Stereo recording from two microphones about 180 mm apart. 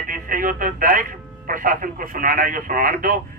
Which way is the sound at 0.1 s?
50° right (ahead or behind).